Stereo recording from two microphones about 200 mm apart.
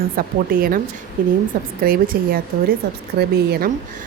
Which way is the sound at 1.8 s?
45° right (ahead or behind).